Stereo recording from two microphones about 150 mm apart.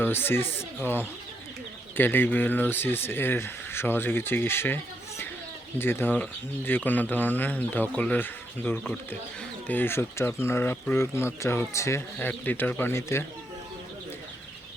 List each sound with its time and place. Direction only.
0.0 s speech: 15° left (ahead or behind)